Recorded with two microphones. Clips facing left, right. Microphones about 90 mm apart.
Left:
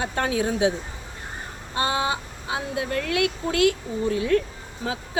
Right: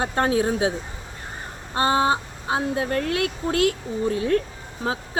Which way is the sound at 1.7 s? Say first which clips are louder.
Right 4 dB; 40° right (ahead or behind).